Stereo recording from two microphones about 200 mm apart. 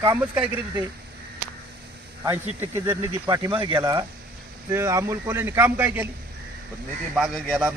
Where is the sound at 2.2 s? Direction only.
15° right (ahead or behind).